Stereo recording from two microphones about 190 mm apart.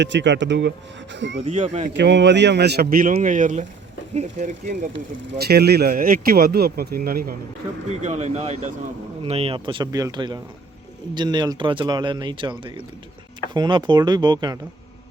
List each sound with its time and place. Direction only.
0.0 s speech: 70° right (ahead or behind)
1.4 s speech: 35° right (ahead or behind)
1.9 s speech: 65° right (ahead or behind); by 4.9 s 40° right (ahead or behind)
5.4 s speech: 55° right (ahead or behind)
7.9 s speech: 35° right (ahead or behind)